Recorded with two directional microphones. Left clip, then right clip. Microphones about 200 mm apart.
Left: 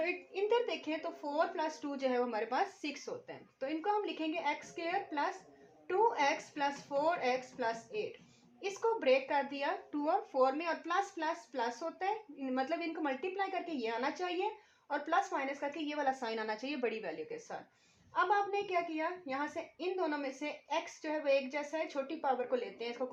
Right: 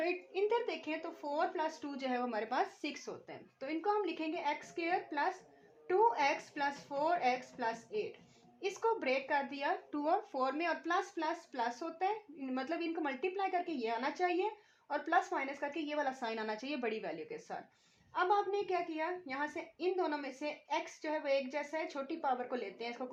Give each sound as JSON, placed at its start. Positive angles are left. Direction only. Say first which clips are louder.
{"t": 0.0, "sound": "a woman's voice", "louder": "even", "side_deg": -30}